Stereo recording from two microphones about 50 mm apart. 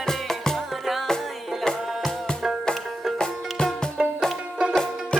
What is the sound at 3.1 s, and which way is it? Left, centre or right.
Music, centre.